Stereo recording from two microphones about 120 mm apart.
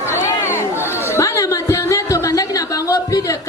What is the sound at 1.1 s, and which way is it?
Music, 25° left (ahead or behind).